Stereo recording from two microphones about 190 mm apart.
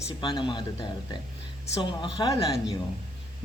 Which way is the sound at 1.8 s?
25° left (ahead or behind).